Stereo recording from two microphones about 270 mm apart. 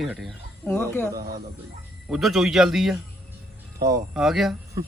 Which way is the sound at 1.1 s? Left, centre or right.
Centre.